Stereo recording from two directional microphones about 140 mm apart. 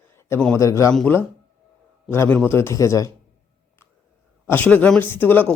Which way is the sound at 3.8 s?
15° left (ahead or behind).